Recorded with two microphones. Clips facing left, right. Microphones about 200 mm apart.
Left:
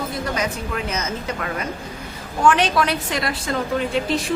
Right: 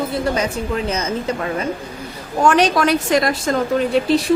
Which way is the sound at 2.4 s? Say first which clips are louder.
Right 3 dB; 40° right (ahead or behind).